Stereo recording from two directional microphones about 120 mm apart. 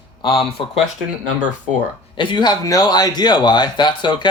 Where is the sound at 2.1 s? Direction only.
40° left (ahead or behind).